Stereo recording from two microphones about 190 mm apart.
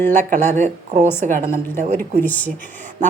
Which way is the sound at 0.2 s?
40° right (ahead or behind).